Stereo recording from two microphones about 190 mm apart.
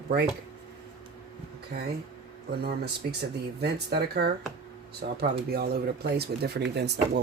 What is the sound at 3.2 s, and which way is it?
Speech, 55° right (ahead or behind).